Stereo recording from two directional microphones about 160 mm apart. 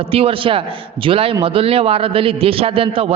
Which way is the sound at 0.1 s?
35° right (ahead or behind).